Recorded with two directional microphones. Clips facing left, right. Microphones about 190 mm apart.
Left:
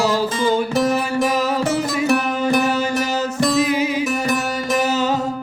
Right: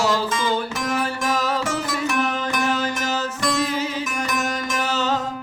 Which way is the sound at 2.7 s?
10° left (ahead or behind).